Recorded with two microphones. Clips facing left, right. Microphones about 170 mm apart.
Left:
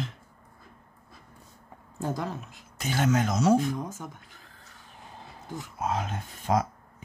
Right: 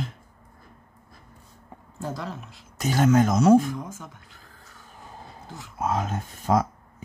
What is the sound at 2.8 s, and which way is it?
Speech, 45° right (ahead or behind).